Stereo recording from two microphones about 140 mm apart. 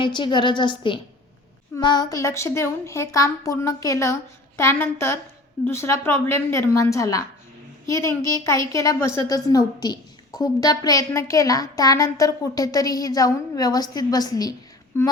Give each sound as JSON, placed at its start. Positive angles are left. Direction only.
{"t": 0.0, "sound": "a woman's voice", "side_deg": 35}